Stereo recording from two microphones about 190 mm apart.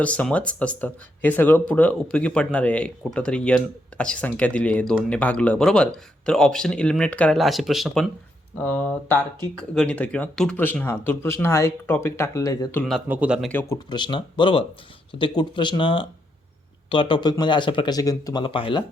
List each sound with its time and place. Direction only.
0.0 s speech: 5° left (ahead or behind)
13.1 s speech: 5° right (ahead or behind)
13.5 s speech: 10° left (ahead or behind)
13.7 s speech: 25° left (ahead or behind)